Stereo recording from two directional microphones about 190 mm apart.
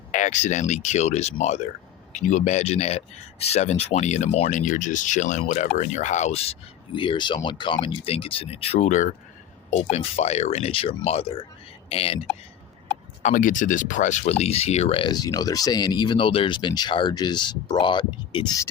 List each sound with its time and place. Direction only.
0.1 s speech: 40° left (ahead or behind)
13.2 s speech: 40° left (ahead or behind); by 18.7 s 20° left (ahead or behind)